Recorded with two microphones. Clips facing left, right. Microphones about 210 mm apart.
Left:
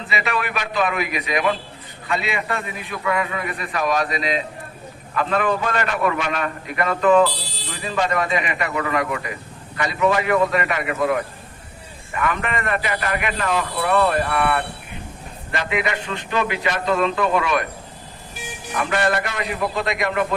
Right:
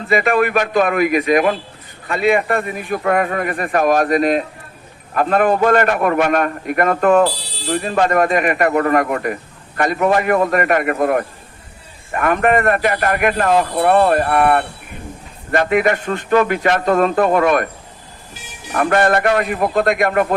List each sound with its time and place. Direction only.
0.1 s a man's voice: 50° right (ahead or behind)
18.7 s a man's voice: 50° right (ahead or behind)